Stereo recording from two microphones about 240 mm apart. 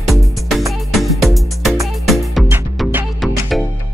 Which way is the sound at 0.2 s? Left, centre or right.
Centre.